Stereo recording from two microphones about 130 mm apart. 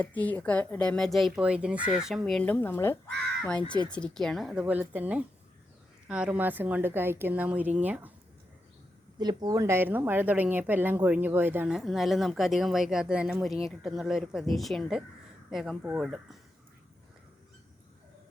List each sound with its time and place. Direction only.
0.0 s speech: 10° left (ahead or behind)
2.4 s speech: 15° left (ahead or behind)
3.9 s a woman's voice: 5° left (ahead or behind); by 8.1 s 10° right (ahead or behind)
9.1 s a woman's voice: 30° right (ahead or behind); by 11.7 s 15° right (ahead or behind)
11.7 s speech: centre (ahead or behind)